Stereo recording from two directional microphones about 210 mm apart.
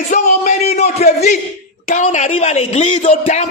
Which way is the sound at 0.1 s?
35° left (ahead or behind).